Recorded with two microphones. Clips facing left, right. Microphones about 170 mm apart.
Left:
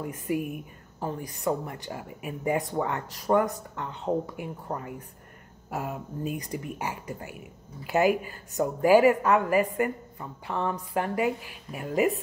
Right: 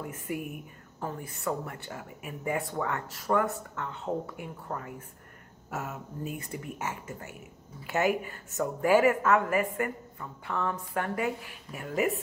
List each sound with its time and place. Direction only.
0.0 s a woman's voice: 20° left (ahead or behind)